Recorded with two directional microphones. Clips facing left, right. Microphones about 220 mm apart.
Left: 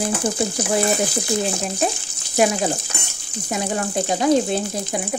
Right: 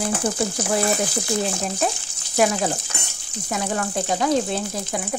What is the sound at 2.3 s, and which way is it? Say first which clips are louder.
Speech: left 1 dB; 20° left (ahead or behind).